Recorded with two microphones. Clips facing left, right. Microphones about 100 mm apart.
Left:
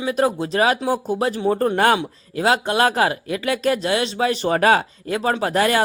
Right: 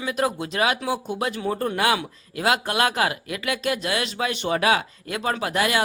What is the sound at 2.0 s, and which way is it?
Speech, 30° left (ahead or behind).